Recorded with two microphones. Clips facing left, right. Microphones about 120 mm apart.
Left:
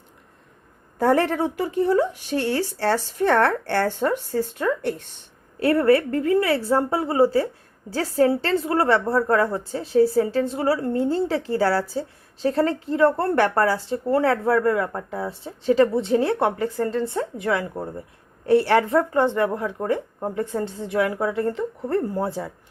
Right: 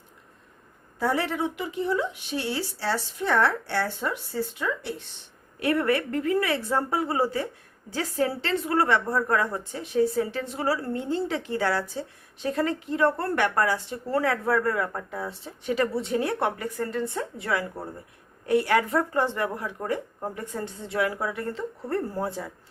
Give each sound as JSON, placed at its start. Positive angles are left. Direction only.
{"t": 0.9, "sound": "speech", "side_deg": 50}
{"t": 5.5, "sound": "a woman's voice", "side_deg": 30}